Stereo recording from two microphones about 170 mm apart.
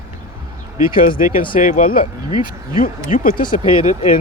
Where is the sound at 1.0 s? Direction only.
55° left (ahead or behind).